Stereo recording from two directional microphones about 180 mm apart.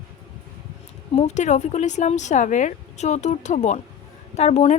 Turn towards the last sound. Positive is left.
turn(degrees=35)  # may be behind; listen again after turning